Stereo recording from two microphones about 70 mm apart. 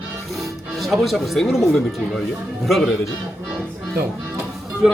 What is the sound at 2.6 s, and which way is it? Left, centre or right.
Speech, centre.